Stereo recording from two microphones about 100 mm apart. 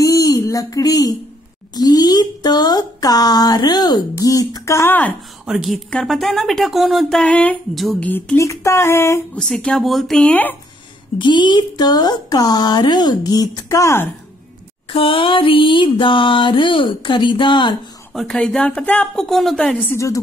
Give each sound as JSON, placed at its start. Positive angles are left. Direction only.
{"t": 0.0, "sound": "a sound", "side_deg": 35}
{"t": 1.8, "sound": "speech", "side_deg": 40}
{"t": 5.5, "sound": "speech", "side_deg": -5}
{"t": 7.7, "sound": "speech", "side_deg": 0}
{"t": 8.0, "sound": "speech", "side_deg": 15}
{"t": 8.4, "sound": "speech", "side_deg": 30}
{"t": 9.3, "sound": "speech", "side_deg": 10}
{"t": 11.1, "sound": "speech", "side_deg": 50}
{"t": 14.9, "sound": "music", "side_deg": 65}
{"t": 18.1, "sound": "speech", "side_deg": 10}
{"t": 19.2, "sound": "speech", "side_deg": 0}
{"t": 19.9, "sound": "a woman's voice", "side_deg": 30}